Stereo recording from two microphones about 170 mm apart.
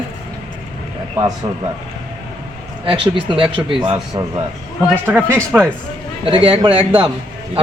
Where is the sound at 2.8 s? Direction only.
30° right (ahead or behind).